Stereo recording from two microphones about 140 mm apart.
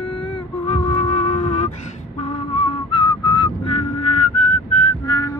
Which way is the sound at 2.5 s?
45° left (ahead or behind).